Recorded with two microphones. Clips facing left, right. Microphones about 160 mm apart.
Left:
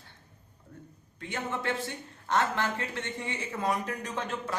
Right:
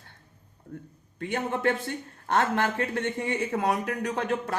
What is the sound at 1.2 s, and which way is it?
A man's voice, 60° right (ahead or behind).